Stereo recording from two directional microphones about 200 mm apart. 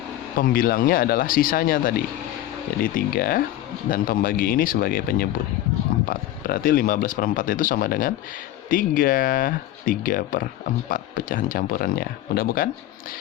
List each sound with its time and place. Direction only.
0.3 s speech: 45° left (ahead or behind)